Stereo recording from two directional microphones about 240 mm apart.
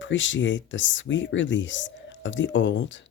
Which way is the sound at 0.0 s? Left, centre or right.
Left.